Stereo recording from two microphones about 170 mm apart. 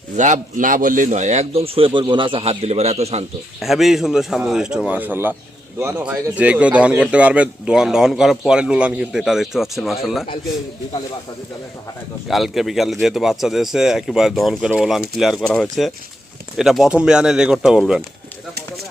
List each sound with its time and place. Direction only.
0.2 s speech: 50° right (ahead or behind)
3.6 s speech: centre (ahead or behind)
12.3 s speech: centre (ahead or behind)